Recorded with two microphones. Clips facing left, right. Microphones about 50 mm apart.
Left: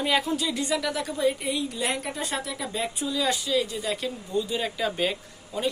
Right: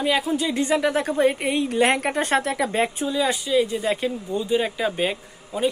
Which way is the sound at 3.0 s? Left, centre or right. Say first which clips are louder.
Right 4 dB; right.